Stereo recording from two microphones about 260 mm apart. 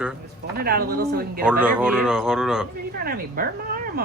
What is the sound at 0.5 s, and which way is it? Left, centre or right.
Speech, right.